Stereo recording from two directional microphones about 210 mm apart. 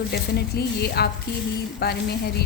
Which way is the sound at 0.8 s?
50° left (ahead or behind).